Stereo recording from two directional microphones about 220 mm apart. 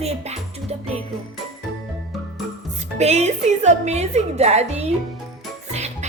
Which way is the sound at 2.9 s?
30° right (ahead or behind).